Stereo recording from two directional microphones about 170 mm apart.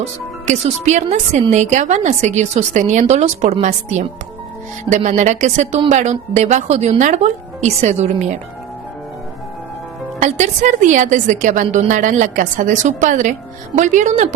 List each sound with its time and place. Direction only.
0.0 s a woman's voice: 40° right (ahead or behind)
10.2 s speech: 45° right (ahead or behind)